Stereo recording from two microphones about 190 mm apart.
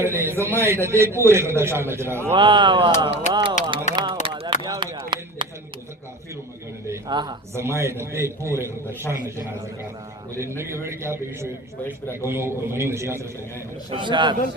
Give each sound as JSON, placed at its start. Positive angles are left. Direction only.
{"t": 0.0, "sound": "a man's voice", "side_deg": -15}
{"t": 2.3, "sound": "speech", "side_deg": -25}
{"t": 3.9, "sound": "a sound", "side_deg": -25}
{"t": 6.8, "sound": "a man's voice", "side_deg": -20}
{"t": 10.8, "sound": "a man's voice", "side_deg": -15}
{"t": 13.9, "sound": "speech", "side_deg": -25}